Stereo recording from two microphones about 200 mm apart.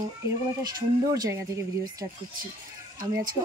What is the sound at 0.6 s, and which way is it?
Speech, 20° right (ahead or behind).